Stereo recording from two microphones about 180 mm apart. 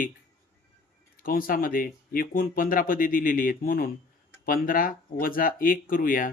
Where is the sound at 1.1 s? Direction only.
55° left (ahead or behind).